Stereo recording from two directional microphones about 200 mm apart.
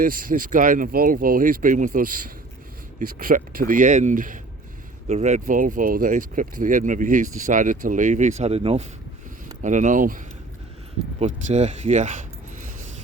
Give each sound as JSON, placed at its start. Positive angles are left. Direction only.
{"t": 0.0, "sound": "speech", "side_deg": -45}